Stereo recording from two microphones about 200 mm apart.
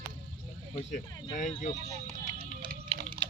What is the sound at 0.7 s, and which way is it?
Speech, 40° left (ahead or behind).